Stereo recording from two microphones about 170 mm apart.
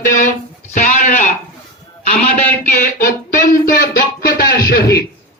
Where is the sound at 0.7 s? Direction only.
50° left (ahead or behind).